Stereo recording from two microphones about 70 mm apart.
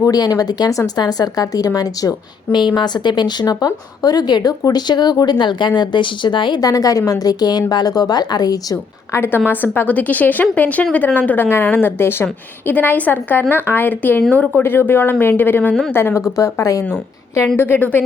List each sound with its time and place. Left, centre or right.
0.0 s a woman's voice: left
9.1 s a woman's voice: left
16.3 s speech: left
17.6 s a woman's voice: left